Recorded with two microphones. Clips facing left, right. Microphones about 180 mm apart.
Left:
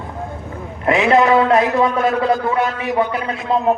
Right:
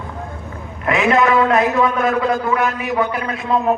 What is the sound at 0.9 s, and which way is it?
A man's voice, 30° left (ahead or behind).